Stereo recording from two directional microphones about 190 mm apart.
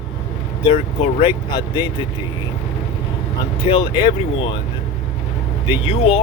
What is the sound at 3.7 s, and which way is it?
Speech, 25° left (ahead or behind).